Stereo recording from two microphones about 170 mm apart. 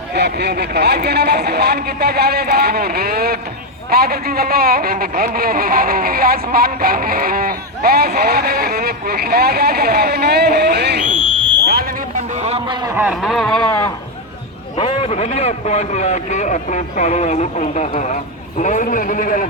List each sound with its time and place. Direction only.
0.1 s a man's voice: 75° right (ahead or behind)
11.6 s fire alarm: 65° right (ahead or behind)
12.4 s speech: 40° right (ahead or behind)
13.0 s speech: 5° right (ahead or behind)
14.8 s a man's voice: 35° left (ahead or behind); by 19.5 s 50° left (ahead or behind)